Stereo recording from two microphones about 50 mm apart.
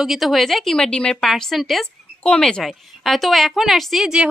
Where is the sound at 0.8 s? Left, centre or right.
Centre.